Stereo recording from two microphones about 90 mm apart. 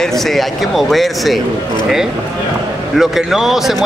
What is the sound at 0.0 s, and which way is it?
Speech, centre (ahead or behind).